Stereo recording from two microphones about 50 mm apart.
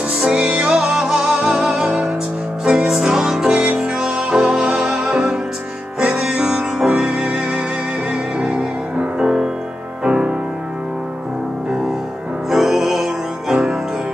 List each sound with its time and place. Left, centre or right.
0.2 s music: centre
12.4 s music: centre